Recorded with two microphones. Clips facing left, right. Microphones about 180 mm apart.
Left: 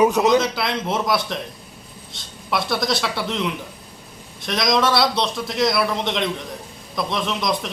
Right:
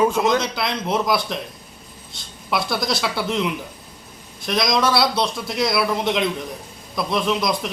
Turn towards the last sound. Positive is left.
turn(degrees=0)  # may be behind; listen again after turning